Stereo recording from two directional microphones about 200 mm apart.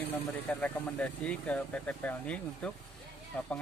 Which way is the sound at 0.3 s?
5° left (ahead or behind).